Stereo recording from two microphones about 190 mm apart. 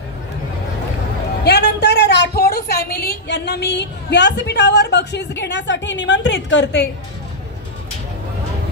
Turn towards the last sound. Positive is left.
turn(degrees=65)  # may be behind; listen again after turning